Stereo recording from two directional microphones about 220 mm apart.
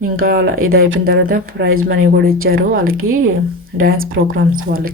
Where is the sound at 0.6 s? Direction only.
70° right (ahead or behind).